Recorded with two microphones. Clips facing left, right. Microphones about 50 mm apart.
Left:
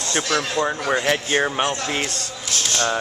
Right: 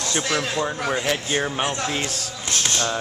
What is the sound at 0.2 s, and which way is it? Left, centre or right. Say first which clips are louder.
Speech: left 3 dB; centre.